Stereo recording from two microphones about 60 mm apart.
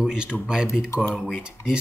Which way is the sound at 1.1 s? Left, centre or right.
Centre.